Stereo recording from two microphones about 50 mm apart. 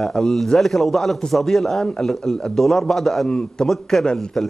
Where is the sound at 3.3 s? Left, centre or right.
Centre.